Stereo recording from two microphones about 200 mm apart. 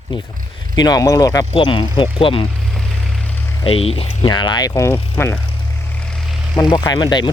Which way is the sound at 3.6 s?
30° left (ahead or behind).